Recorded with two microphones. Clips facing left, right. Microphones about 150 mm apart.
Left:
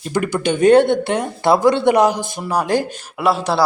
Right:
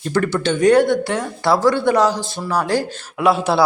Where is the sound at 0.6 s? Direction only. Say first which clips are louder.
Left 2 dB; 25° left (ahead or behind).